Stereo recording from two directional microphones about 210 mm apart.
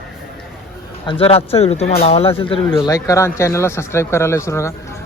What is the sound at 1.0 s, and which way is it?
Speech, 25° left (ahead or behind).